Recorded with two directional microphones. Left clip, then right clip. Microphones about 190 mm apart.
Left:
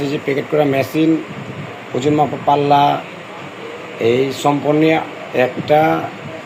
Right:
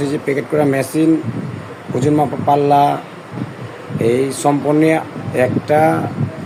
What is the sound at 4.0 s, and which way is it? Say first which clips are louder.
Speech: even; 20° right (ahead or behind).